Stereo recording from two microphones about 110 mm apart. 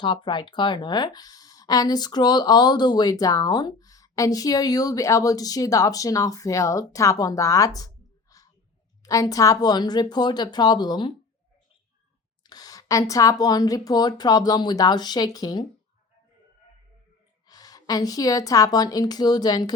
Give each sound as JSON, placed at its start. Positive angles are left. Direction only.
{"t": 0.0, "sound": "speech", "side_deg": 45}
{"t": 12.4, "sound": "speech", "side_deg": 35}
{"t": 17.5, "sound": "speech", "side_deg": 35}